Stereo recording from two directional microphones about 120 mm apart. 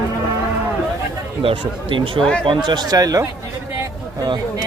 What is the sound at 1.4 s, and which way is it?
Speech, 45° right (ahead or behind).